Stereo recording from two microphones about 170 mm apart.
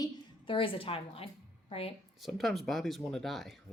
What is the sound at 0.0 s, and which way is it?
A woman's voice, 30° left (ahead or behind).